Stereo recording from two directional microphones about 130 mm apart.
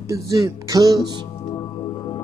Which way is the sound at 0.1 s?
25° right (ahead or behind).